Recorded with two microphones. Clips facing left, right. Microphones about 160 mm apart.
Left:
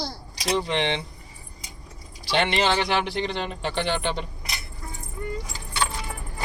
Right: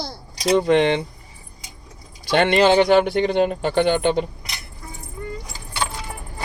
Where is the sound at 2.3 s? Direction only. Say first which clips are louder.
Right 7 dB; 50° right (ahead or behind).